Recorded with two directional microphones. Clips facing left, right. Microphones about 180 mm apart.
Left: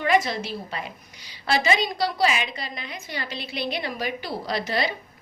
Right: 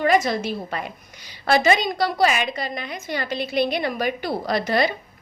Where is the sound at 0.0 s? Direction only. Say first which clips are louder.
Right 3 dB; 45° right (ahead or behind).